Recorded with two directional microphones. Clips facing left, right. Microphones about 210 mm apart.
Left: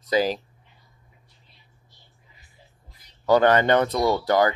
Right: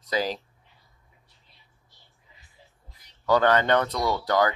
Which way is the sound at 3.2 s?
20° left (ahead or behind).